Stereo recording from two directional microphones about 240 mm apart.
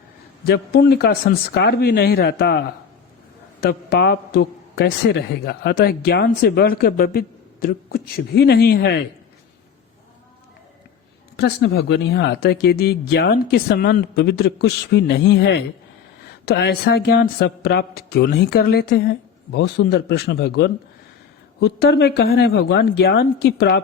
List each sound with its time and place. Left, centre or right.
0.4 s a man's voice: left
11.3 s a man's voice: left